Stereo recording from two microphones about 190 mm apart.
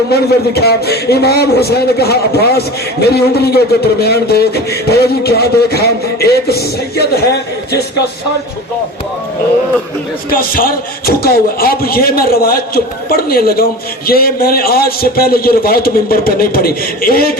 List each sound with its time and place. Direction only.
0.1 s a man's voice: 55° left (ahead or behind)
10.3 s speech: 50° left (ahead or behind)